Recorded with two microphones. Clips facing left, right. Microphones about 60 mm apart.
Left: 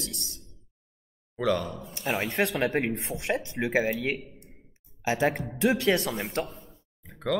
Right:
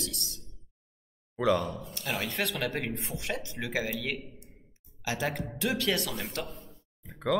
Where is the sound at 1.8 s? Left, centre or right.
Centre.